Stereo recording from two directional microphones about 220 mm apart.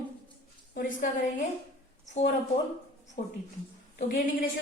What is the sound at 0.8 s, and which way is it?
Speech, 35° left (ahead or behind).